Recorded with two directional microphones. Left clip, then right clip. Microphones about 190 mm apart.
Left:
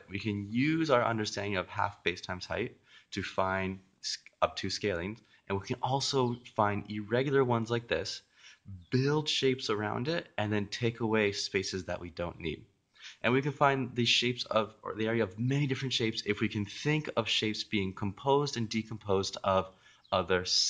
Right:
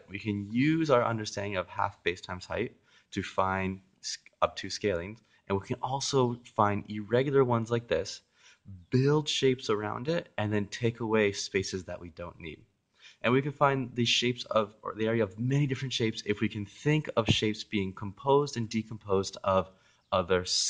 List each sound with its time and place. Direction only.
0.1 s speech: 35° right (ahead or behind)